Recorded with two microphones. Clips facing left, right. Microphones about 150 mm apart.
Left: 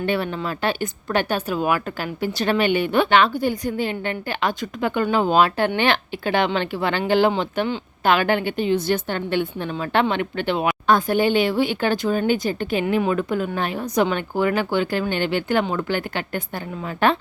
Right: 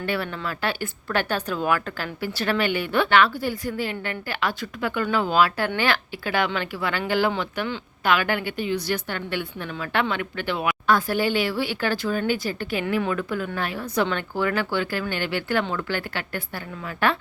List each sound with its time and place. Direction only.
0.0 s a woman's voice: 20° left (ahead or behind)